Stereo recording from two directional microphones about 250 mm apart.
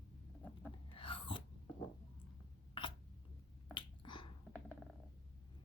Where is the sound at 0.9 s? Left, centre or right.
Left.